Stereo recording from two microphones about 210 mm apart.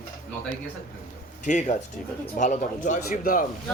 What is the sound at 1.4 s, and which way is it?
A man's voice, 35° left (ahead or behind).